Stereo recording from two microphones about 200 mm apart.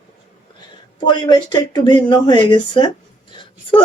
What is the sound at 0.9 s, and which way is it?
Speech, 20° left (ahead or behind).